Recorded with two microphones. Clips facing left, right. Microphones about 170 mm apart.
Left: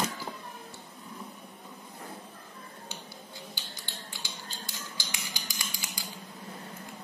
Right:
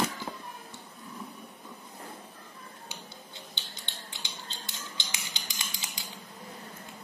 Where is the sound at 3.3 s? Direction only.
20° right (ahead or behind).